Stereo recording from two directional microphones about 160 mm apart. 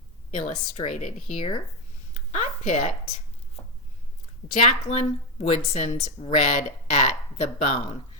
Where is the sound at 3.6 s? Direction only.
35° left (ahead or behind).